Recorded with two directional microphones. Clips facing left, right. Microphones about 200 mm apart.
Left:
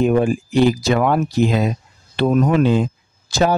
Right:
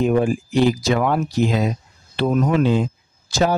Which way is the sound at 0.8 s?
60° left (ahead or behind).